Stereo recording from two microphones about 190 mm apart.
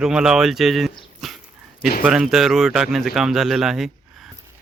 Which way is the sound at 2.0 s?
Centre (ahead or behind).